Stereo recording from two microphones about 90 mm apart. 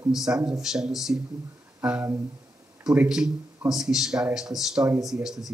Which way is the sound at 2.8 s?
10° right (ahead or behind).